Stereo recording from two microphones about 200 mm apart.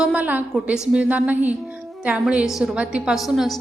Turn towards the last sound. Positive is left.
turn(degrees=0)  # may be behind; listen again after turning